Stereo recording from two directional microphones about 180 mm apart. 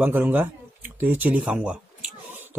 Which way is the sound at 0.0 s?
10° right (ahead or behind).